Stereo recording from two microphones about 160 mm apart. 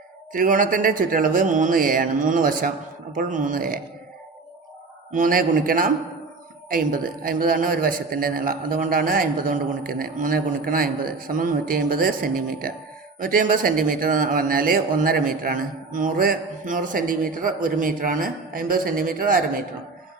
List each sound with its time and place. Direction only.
0.3 s a man's voice: 55° right (ahead or behind)
5.1 s a man's voice: 60° right (ahead or behind)